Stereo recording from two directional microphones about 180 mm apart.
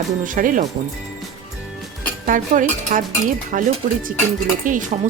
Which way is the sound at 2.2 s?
50° right (ahead or behind).